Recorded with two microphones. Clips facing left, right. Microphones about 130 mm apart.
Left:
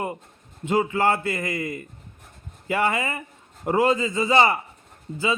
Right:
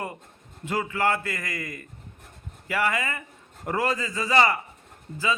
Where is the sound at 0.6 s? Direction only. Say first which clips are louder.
Left 4 dB; 25° left (ahead or behind).